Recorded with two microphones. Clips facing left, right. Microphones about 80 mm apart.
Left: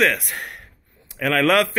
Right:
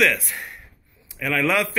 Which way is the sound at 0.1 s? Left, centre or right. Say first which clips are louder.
Left 1 dB; left.